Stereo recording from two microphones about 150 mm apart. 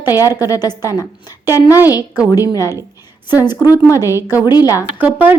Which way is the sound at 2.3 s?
25° left (ahead or behind).